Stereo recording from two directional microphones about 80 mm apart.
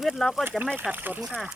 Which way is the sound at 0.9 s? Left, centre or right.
Right.